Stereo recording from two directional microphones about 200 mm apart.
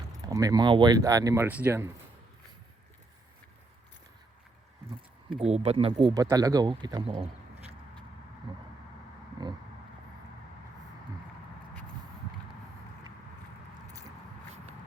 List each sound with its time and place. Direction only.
0.3 s speech: 15° right (ahead or behind)
5.4 s speech: 30° right (ahead or behind)
8.5 s a sound: 25° right (ahead or behind)